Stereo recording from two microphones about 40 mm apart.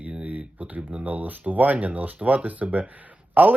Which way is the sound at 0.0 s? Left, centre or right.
Right.